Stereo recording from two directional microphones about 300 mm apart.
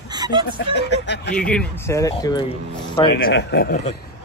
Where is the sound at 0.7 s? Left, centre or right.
Left.